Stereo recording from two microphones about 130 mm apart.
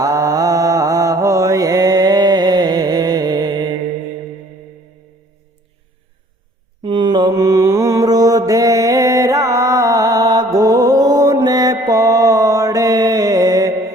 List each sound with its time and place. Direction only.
0.0 s mantra: 25° right (ahead or behind)
6.8 s mantra: 35° right (ahead or behind)